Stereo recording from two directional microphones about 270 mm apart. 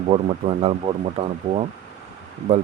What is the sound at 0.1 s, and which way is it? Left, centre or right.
Speech, right.